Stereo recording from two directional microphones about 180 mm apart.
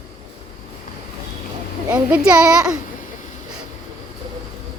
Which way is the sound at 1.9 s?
5° right (ahead or behind).